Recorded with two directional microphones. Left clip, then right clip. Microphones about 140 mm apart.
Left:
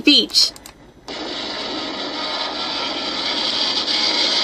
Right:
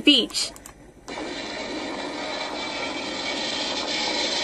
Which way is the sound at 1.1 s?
25° right (ahead or behind).